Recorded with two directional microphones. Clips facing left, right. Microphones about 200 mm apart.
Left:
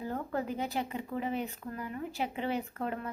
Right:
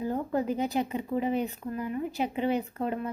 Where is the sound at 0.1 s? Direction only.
20° right (ahead or behind).